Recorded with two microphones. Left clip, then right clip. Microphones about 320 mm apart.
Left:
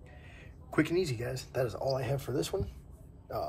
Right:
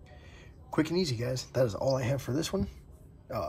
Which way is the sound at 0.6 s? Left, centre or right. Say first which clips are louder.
Even; centre.